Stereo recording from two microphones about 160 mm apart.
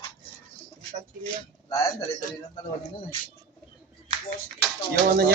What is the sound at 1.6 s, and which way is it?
Speech, 20° left (ahead or behind).